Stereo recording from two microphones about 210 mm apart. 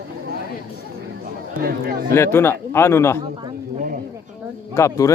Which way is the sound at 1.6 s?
45° right (ahead or behind).